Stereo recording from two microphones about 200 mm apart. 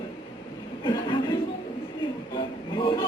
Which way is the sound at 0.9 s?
20° left (ahead or behind).